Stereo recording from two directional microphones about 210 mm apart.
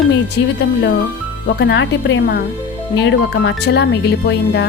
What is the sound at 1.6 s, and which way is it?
Speech, 55° left (ahead or behind).